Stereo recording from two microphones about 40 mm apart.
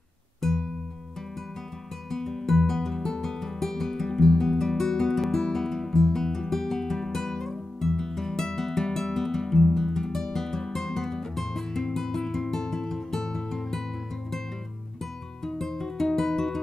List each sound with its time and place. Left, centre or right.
0.4 s music: centre
2.0 s music: centre
15.4 s music: centre